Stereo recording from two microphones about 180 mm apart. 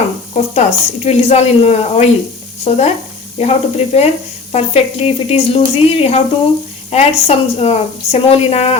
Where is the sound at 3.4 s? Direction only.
35° left (ahead or behind).